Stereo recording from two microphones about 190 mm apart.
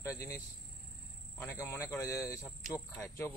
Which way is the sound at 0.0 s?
15° left (ahead or behind).